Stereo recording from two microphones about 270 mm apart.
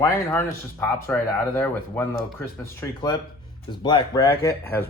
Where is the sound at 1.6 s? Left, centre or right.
Centre.